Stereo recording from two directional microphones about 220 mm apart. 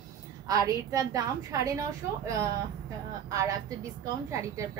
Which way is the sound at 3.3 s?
15° right (ahead or behind).